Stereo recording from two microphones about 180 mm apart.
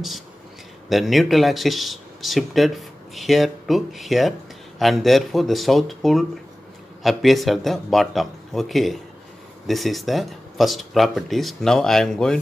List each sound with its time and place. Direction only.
0.8 s speech: centre (ahead or behind)